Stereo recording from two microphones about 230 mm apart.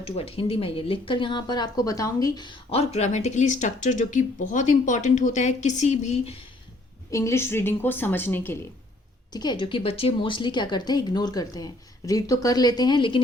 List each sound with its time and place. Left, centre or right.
0.0 s speech: left
7.1 s a woman's voice: centre